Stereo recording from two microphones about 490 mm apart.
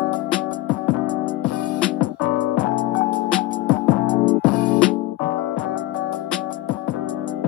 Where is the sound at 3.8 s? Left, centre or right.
Centre.